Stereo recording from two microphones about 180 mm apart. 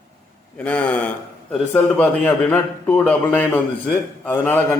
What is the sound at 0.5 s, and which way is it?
A man's voice, 5° left (ahead or behind).